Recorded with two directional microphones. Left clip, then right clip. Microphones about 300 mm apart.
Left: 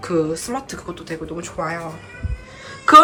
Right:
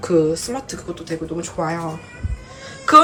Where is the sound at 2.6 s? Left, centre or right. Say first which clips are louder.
Left 2 dB; centre.